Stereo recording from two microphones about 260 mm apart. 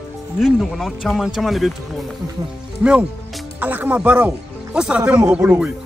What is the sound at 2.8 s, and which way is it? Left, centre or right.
A man's voice, centre.